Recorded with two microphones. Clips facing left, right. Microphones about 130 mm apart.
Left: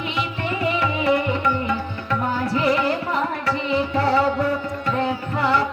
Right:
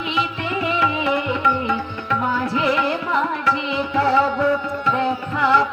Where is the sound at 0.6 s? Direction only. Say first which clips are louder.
Right 1 dB; 40° left (ahead or behind).